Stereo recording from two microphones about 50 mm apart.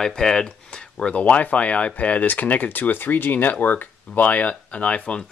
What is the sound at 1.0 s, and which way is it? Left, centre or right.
Speech, left.